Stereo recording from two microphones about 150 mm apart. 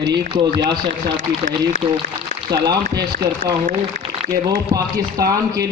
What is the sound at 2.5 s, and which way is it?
Speech, 25° right (ahead or behind).